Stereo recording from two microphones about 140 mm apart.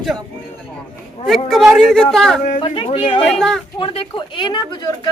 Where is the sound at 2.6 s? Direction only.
40° left (ahead or behind).